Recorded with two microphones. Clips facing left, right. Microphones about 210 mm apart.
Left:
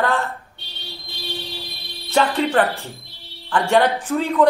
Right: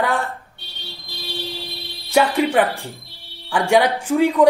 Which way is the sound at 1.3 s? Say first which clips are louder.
Right 4 dB; 30° right (ahead or behind).